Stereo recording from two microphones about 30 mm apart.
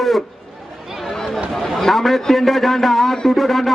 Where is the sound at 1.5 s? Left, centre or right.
Centre.